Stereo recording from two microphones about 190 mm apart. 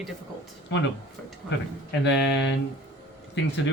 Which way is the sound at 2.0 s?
70° left (ahead or behind).